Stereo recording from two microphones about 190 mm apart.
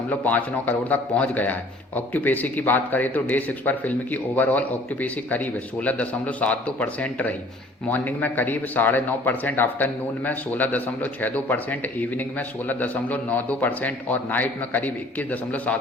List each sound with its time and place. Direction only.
0.1 s speech: 10° left (ahead or behind)